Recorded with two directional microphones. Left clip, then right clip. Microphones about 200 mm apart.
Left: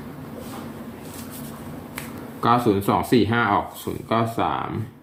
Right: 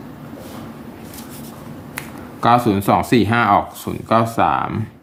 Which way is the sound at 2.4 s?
25° right (ahead or behind).